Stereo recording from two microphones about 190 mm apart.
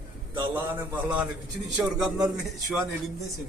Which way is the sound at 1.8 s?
20° right (ahead or behind).